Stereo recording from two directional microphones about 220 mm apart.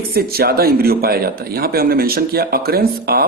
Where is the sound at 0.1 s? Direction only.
45° right (ahead or behind).